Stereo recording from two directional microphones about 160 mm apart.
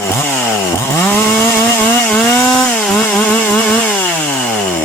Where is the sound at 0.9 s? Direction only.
10° left (ahead or behind).